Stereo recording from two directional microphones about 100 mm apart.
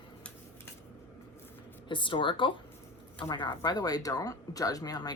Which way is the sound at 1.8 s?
55° left (ahead or behind).